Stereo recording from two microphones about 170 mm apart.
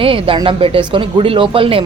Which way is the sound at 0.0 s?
30° right (ahead or behind).